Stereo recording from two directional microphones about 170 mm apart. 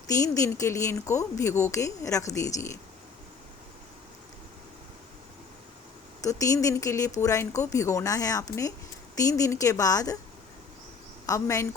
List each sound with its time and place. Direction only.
0.1 s a woman's voice: 20° left (ahead or behind)
6.2 s a woman's voice: 20° left (ahead or behind)
11.3 s a woman's voice: 20° left (ahead or behind)